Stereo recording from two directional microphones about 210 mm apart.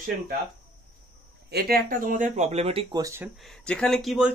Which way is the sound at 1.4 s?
50° right (ahead or behind).